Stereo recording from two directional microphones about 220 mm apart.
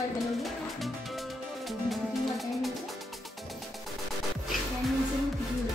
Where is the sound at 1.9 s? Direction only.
Centre (ahead or behind).